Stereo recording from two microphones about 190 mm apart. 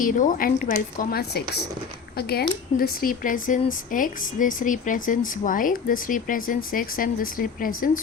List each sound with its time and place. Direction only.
0.0 s speech: 45° left (ahead or behind)